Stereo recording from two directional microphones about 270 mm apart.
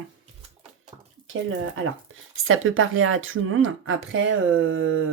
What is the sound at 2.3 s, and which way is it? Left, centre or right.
Speech, right.